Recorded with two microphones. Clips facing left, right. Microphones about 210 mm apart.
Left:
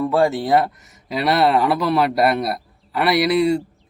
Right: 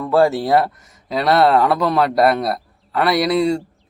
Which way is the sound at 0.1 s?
Centre (ahead or behind).